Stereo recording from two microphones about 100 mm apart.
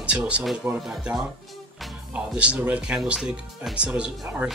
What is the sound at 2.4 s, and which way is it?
Speech, 10° right (ahead or behind).